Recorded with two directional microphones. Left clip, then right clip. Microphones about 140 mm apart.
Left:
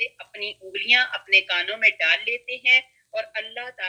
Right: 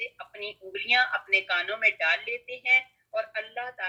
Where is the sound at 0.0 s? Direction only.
35° left (ahead or behind).